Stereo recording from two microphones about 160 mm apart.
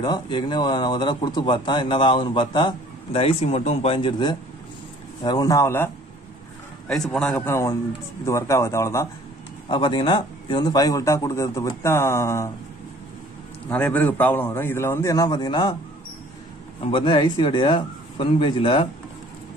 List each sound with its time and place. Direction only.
0.0 s speech: 30° left (ahead or behind)
6.9 s a man's voice: 5° left (ahead or behind)
7.3 s a man's voice: 15° left (ahead or behind)
9.7 s speech: 30° left (ahead or behind)
13.7 s a man's voice: 10° left (ahead or behind); by 15.7 s 25° left (ahead or behind)
16.8 s a man's voice: 30° left (ahead or behind)